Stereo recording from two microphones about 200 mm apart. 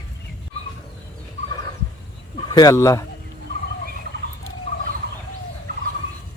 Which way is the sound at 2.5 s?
15° left (ahead or behind).